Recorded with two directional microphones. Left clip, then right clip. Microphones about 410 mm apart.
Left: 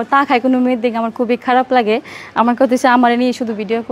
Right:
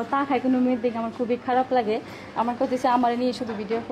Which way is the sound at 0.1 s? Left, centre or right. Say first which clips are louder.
Left 11 dB; left.